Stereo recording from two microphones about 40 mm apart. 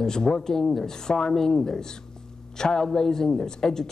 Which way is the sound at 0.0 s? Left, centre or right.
Centre.